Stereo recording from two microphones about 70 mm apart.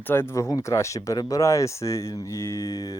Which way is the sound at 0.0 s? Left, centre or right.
Left.